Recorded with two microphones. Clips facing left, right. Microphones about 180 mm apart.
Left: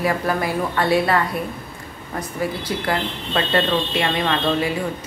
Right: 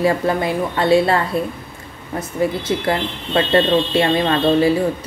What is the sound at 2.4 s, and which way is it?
Speech, 25° right (ahead or behind).